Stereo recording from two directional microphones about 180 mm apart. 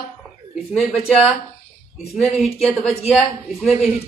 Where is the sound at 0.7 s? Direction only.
Centre (ahead or behind).